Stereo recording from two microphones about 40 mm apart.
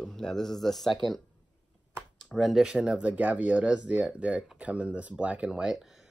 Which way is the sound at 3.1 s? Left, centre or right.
Right.